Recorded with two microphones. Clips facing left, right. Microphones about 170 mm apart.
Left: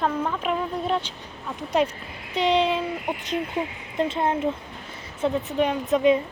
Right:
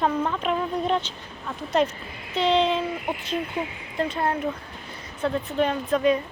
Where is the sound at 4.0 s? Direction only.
20° left (ahead or behind).